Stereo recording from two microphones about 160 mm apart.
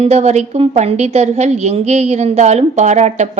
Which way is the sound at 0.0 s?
45° right (ahead or behind).